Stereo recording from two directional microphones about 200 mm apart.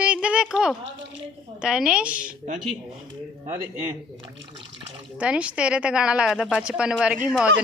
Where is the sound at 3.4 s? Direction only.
40° right (ahead or behind).